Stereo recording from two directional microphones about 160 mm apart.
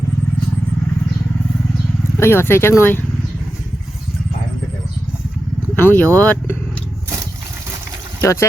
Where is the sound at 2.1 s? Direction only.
15° left (ahead or behind).